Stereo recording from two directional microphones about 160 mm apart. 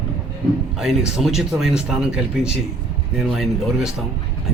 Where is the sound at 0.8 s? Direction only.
5° right (ahead or behind).